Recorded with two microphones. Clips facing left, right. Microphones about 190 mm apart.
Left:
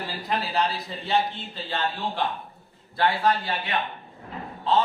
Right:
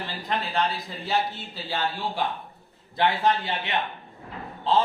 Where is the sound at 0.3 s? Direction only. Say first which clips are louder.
Left 1 dB; 5° left (ahead or behind).